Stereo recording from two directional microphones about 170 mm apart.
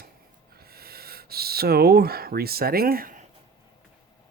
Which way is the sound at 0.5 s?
65° right (ahead or behind).